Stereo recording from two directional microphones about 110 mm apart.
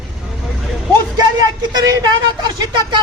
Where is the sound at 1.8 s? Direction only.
35° right (ahead or behind).